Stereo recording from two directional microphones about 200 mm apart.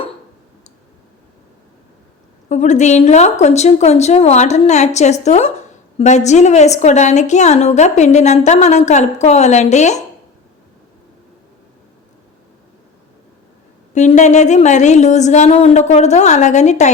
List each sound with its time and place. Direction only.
2.5 s a woman's voice: 35° left (ahead or behind)
13.9 s a woman's voice: 35° left (ahead or behind)